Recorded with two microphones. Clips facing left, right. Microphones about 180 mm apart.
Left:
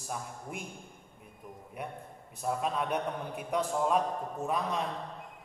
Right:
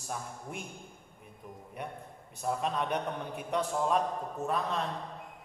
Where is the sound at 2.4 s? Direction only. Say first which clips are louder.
Even; 5° left (ahead or behind).